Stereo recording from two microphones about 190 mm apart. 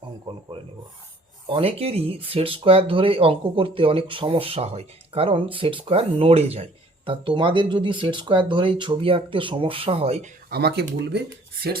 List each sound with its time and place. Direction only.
1.5 s speech: 30° right (ahead or behind)
10.5 s speech: 60° right (ahead or behind)